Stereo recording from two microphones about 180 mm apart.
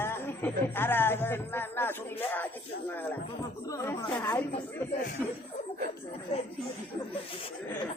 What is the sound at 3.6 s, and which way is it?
Speech, 20° left (ahead or behind).